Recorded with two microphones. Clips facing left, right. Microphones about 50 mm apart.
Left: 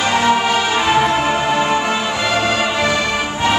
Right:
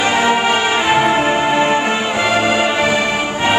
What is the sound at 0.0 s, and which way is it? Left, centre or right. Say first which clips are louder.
Music: right 1 dB; centre.